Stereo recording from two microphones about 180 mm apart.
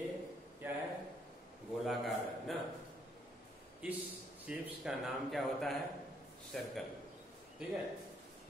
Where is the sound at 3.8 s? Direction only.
5° right (ahead or behind).